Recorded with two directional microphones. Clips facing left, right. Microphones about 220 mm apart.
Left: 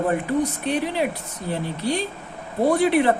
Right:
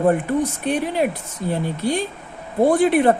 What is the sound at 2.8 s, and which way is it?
Speech, 50° right (ahead or behind).